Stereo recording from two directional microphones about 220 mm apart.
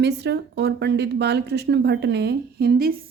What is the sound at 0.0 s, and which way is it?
Speech, 50° right (ahead or behind).